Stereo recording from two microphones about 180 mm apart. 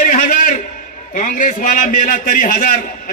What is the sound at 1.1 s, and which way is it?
A man's voice, 45° left (ahead or behind).